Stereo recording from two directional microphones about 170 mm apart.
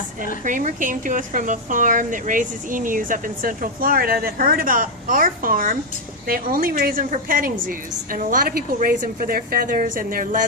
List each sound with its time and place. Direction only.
0.4 s a woman's voice: 50° right (ahead or behind)